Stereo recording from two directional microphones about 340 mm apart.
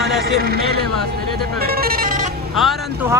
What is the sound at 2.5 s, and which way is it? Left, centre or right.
Speech, centre.